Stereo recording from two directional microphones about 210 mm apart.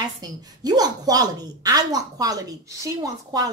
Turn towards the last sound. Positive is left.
turn(degrees=-15)  # may be behind; listen again after turning